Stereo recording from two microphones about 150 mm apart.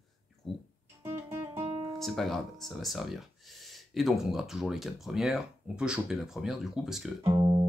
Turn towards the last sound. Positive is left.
turn(degrees=-25)  # may be behind; listen again after turning